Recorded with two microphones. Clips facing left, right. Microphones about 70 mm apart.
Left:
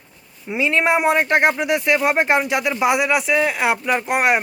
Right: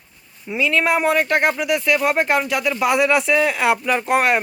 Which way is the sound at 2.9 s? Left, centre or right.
Centre.